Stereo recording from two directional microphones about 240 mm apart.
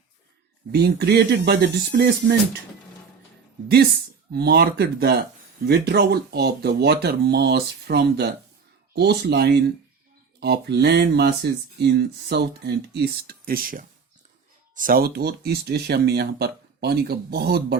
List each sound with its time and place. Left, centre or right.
0.7 s speech: right
4.3 s speech: right